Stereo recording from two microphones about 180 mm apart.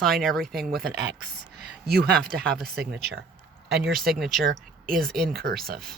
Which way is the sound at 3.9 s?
Centre (ahead or behind).